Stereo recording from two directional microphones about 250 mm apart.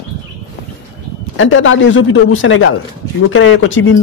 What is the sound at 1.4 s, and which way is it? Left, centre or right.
A man's voice, left.